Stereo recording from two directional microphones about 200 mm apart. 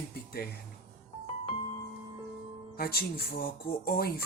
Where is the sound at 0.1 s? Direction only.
50° left (ahead or behind).